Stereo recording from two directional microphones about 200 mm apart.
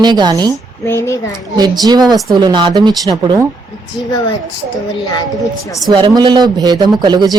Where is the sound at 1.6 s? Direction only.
20° right (ahead or behind).